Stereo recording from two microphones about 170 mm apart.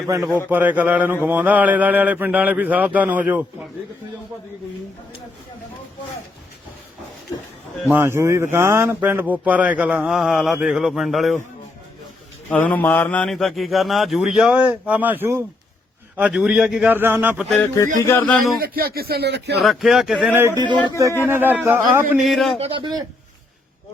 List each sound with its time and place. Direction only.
0.2 s a man's voice: centre (ahead or behind)
0.5 s speech: 10° right (ahead or behind)
7.9 s speech: 15° right (ahead or behind)
12.5 s a man's voice: 10° left (ahead or behind); by 17.4 s 10° right (ahead or behind)
18.0 s speech: 10° left (ahead or behind)
18.6 s speech: 60° right (ahead or behind); by 19.6 s 80° right
19.6 s a man's voice: centre (ahead or behind)
20.3 s speech: 15° right (ahead or behind)
22.2 s a man's voice: centre (ahead or behind)
22.5 s a man's voice: 35° right (ahead or behind)